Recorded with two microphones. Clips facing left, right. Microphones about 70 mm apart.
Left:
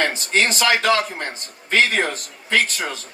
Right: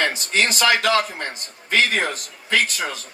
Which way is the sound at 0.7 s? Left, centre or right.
Left.